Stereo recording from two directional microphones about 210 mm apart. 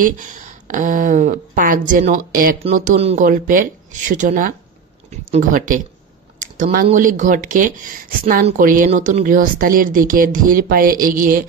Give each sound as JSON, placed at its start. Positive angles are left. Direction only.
{"t": 0.0, "sound": "a woman's voice", "side_deg": -35}